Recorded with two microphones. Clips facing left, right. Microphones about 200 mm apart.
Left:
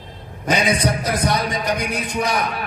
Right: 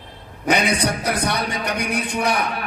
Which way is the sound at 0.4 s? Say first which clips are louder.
Even; 65° right (ahead or behind).